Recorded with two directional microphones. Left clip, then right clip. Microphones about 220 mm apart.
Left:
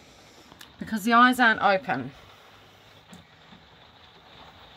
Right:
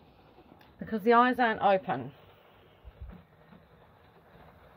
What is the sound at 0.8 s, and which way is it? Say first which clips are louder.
A woman's voice: left 4 dB; 5° left (ahead or behind).